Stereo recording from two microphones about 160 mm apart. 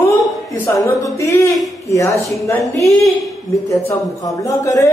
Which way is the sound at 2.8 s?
Centre (ahead or behind).